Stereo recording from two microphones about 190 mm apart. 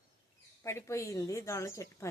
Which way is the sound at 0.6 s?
15° left (ahead or behind).